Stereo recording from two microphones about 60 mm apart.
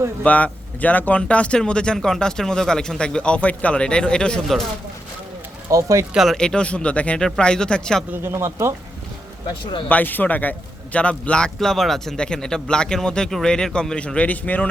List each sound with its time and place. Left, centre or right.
0.2 s speech: left
5.6 s speech: right
6.3 s speech: centre
8.1 s speech: right
9.9 s speech: left